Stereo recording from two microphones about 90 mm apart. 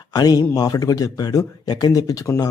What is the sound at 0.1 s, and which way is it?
Speech, 45° left (ahead or behind).